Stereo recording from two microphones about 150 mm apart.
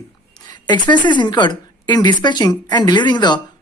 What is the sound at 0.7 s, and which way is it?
A woman's voice, 30° left (ahead or behind).